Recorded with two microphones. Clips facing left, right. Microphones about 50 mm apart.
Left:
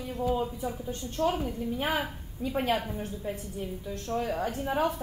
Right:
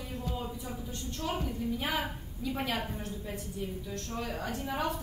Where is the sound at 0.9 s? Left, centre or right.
Left.